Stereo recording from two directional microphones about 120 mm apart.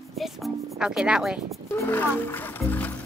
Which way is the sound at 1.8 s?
15° left (ahead or behind).